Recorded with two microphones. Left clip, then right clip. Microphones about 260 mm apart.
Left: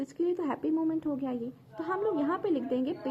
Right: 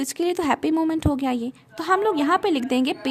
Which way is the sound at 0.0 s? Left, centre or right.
Right.